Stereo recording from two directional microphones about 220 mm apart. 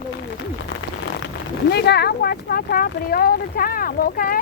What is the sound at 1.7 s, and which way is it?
Speech, 50° left (ahead or behind).